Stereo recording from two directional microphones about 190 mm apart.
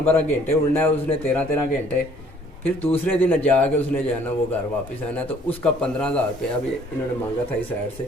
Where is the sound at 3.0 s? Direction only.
10° left (ahead or behind).